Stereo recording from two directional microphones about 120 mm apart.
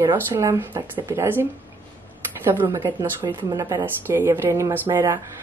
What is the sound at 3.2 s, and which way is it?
Speech, 40° right (ahead or behind).